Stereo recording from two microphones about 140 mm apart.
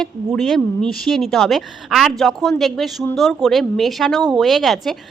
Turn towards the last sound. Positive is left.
turn(degrees=0)  # may be behind; listen again after turning